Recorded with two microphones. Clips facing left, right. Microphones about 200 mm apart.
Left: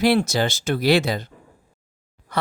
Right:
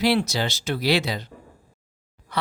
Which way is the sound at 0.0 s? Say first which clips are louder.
Left 3 dB; 50° left (ahead or behind).